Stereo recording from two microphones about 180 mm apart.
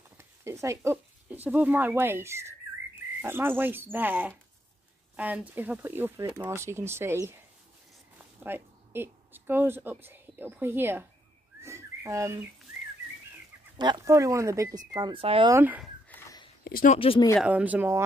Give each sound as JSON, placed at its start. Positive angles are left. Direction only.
{"t": 0.2, "sound": "speech", "side_deg": -15}
{"t": 8.2, "sound": "speech", "side_deg": -10}
{"t": 11.6, "sound": "bird", "side_deg": -15}
{"t": 13.7, "sound": "speech", "side_deg": -20}
{"t": 15.5, "sound": "speech", "side_deg": -10}
{"t": 16.6, "sound": "a sound", "side_deg": 55}
{"t": 16.9, "sound": "speech", "side_deg": 30}
{"t": 17.4, "sound": "speech", "side_deg": -5}